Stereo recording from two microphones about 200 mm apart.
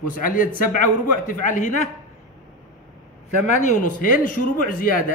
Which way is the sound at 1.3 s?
40° left (ahead or behind).